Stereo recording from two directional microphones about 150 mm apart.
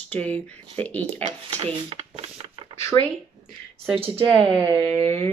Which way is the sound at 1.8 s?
40° right (ahead or behind).